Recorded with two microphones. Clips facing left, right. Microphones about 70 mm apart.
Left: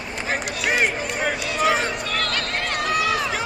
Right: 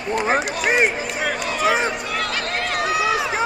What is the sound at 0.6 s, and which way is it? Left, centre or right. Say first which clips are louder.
Run: even; centre.